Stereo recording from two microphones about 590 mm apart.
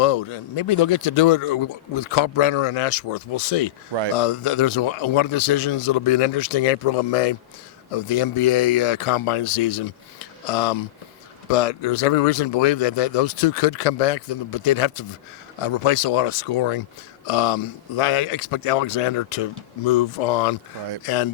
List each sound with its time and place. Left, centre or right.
0.0 s speech: left
4.1 s speech: left
7.9 s speech: left
21.0 s speech: left